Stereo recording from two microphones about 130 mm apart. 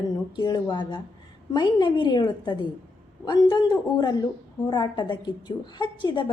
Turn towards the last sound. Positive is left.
turn(degrees=35)  # may be behind; listen again after turning